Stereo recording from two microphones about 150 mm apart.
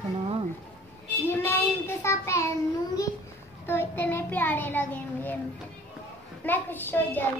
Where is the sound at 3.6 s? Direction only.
15° left (ahead or behind).